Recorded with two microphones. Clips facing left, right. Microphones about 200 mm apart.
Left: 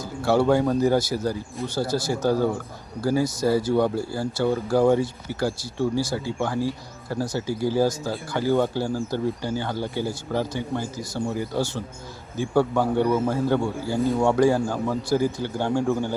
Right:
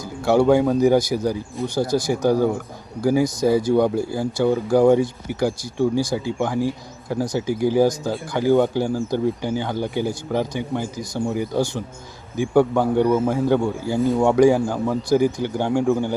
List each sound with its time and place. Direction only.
0.2 s speech: 15° right (ahead or behind)